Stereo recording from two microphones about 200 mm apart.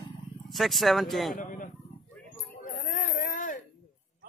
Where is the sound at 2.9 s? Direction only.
40° left (ahead or behind).